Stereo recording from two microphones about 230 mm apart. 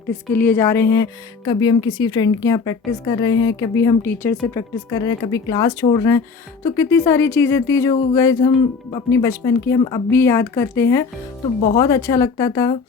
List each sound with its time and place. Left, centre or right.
0.3 s speech: centre